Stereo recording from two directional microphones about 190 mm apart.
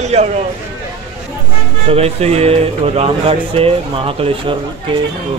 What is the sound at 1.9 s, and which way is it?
Speech, 30° right (ahead or behind).